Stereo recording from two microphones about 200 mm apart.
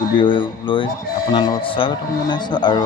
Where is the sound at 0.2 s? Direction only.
25° left (ahead or behind).